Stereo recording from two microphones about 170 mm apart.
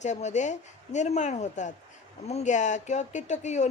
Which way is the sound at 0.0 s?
45° left (ahead or behind).